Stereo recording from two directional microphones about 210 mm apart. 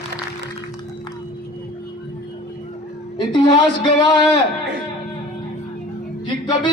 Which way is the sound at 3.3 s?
20° left (ahead or behind).